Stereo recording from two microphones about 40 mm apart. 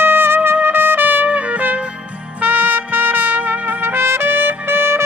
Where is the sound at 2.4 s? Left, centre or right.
Right.